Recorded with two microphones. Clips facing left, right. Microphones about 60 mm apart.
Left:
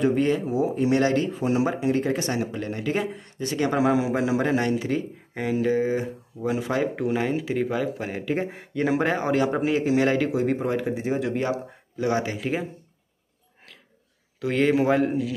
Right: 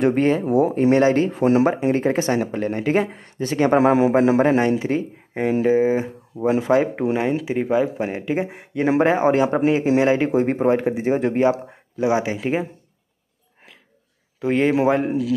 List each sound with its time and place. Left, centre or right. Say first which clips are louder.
0.0 s speech: right 4 dB; right
1.3 s speech: right 7 dB; right
1.7 s speech: right 4 dB; right
4.6 s speech: right 5 dB; right
8.4 s speech: right 3 dB; centre
8.8 s speech: right 6 dB; right
10.3 s speech: right 6 dB; right
12.0 s speech: right 5 dB; centre
12.4 s speech: right 5 dB; right
14.4 s speech: right 3 dB; right